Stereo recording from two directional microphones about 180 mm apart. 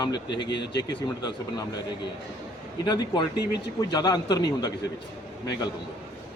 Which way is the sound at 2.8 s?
25° left (ahead or behind).